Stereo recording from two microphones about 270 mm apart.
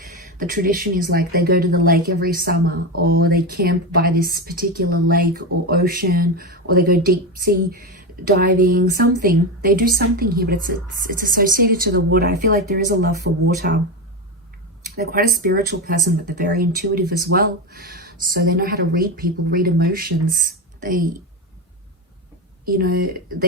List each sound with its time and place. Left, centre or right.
0.3 s speech: right
14.9 s speech: right
22.6 s speech: right